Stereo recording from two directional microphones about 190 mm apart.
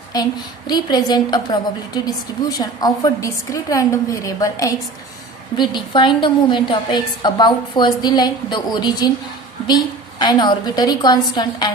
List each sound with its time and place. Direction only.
0.1 s a woman's voice: 20° left (ahead or behind)